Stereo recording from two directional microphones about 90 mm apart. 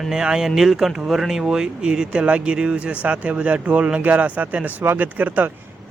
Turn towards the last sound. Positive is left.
turn(degrees=-20)  # may be behind; listen again after turning